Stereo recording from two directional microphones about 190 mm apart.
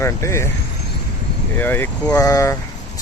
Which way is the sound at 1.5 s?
10° left (ahead or behind).